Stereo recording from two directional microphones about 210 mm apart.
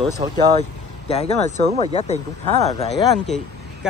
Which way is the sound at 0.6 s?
30° left (ahead or behind).